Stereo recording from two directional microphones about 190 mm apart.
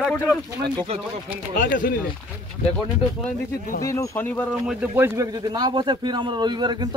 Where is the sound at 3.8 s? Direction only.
10° left (ahead or behind).